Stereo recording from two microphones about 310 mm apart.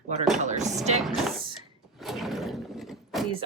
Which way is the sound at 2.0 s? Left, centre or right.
Centre.